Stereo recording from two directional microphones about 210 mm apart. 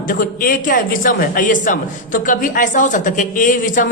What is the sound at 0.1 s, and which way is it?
A man's voice, 40° left (ahead or behind).